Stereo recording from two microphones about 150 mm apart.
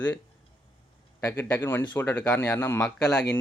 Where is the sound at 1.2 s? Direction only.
20° left (ahead or behind).